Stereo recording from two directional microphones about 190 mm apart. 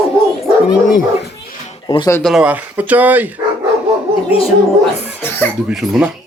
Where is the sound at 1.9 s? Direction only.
25° left (ahead or behind).